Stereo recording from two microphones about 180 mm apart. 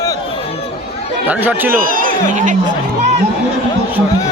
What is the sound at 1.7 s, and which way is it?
Speech, 50° right (ahead or behind).